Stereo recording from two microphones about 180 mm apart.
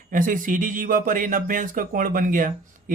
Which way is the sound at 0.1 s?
50° right (ahead or behind).